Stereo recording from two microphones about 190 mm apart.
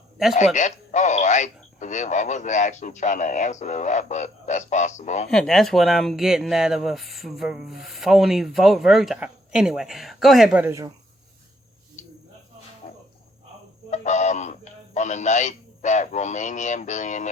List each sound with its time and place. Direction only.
0.3 s speech: 40° left (ahead or behind)
5.3 s speech: centre (ahead or behind); by 10.9 s 15° right (ahead or behind)
12.8 s a sound: 30° left (ahead or behind)